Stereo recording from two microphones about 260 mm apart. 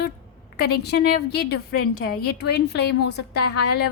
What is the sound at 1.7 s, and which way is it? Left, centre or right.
Speech, left.